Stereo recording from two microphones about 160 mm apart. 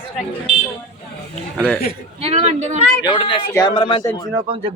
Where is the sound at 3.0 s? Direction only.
30° left (ahead or behind).